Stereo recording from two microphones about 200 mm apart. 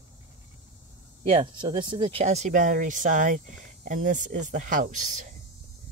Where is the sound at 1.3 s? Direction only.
25° right (ahead or behind); by 5.3 s 40° right (ahead or behind).